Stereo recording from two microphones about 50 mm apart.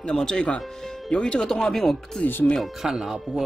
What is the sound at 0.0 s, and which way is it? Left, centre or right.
Speech, centre.